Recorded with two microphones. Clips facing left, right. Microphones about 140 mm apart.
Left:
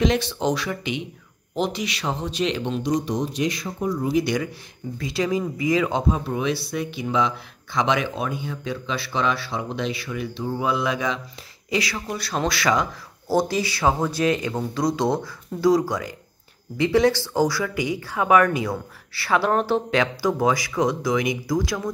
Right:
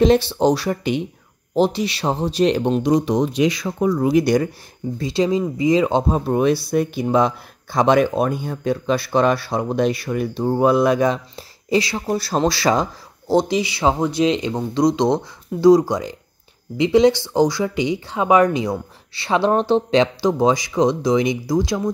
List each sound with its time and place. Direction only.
0.0 s speech: 35° right (ahead or behind)
2.8 s speech: 70° right (ahead or behind); by 4.2 s 90° right
4.2 s speech: 45° right (ahead or behind)
4.9 s speech: 30° right (ahead or behind)
13.3 s speech: 20° right (ahead or behind)